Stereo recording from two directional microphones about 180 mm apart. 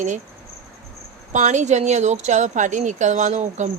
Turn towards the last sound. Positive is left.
turn(degrees=-40)  # may be behind; listen again after turning